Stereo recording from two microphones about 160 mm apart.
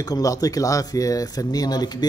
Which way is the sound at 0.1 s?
20° left (ahead or behind).